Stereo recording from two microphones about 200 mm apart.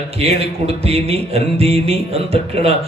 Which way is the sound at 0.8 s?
30° right (ahead or behind).